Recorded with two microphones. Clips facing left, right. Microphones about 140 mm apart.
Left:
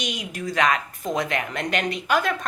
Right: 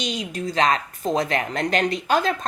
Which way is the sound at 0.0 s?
25° right (ahead or behind).